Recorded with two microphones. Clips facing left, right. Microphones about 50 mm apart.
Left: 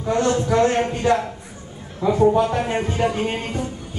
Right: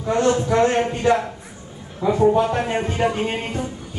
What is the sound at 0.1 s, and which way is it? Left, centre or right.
A man's voice, centre.